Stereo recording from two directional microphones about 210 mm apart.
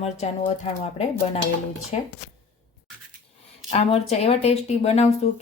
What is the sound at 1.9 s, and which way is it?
Speech, 30° left (ahead or behind).